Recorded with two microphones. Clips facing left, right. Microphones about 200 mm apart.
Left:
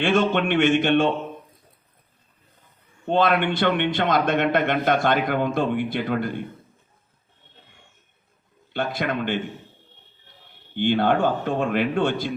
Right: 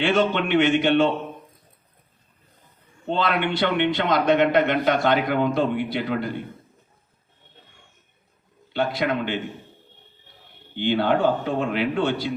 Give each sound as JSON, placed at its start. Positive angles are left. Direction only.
{"t": 0.0, "sound": "speech", "side_deg": 50}
{"t": 3.1, "sound": "speech", "side_deg": 50}
{"t": 8.7, "sound": "speech", "side_deg": 50}
{"t": 10.8, "sound": "speech", "side_deg": 50}